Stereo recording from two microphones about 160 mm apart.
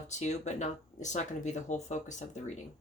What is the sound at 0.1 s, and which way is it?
Speech, 45° left (ahead or behind).